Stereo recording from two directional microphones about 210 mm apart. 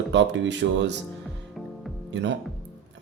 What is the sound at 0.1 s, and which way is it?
Speech, 60° right (ahead or behind).